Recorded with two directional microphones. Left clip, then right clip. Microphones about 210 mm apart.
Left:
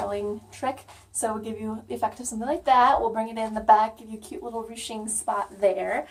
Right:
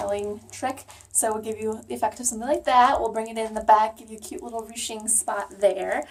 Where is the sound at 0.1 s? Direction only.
15° right (ahead or behind).